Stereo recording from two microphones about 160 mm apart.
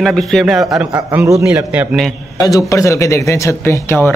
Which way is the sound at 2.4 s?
20° left (ahead or behind).